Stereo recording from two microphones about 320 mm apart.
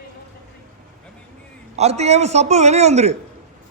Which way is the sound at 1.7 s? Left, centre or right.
Centre.